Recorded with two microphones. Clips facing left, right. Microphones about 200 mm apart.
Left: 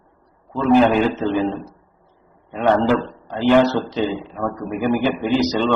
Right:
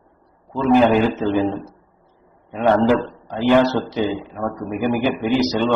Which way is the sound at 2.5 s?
10° right (ahead or behind).